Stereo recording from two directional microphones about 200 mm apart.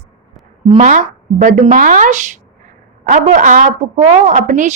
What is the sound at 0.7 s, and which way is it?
A woman's voice, 40° right (ahead or behind).